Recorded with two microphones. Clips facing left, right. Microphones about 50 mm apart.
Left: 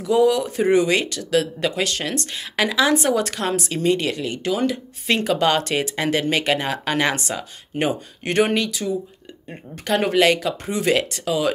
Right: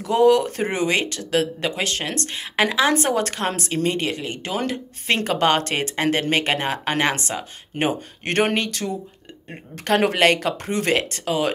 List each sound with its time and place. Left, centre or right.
0.0 s speech: right
2.9 s speech: right
8.2 s speech: right
11.0 s speech: right